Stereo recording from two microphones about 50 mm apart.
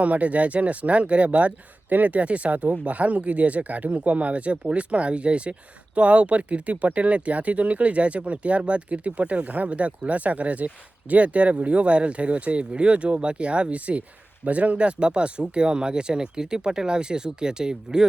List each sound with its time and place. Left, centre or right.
0.0 s speech: right